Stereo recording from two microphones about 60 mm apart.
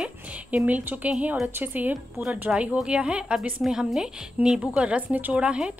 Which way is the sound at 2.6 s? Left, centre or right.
Centre.